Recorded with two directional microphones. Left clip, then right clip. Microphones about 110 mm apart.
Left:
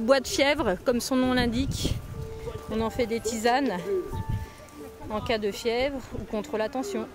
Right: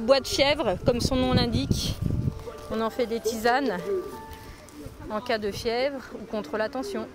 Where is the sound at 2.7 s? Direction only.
25° left (ahead or behind).